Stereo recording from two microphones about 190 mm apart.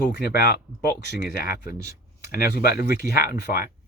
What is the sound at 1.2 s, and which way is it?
Speech, 50° left (ahead or behind).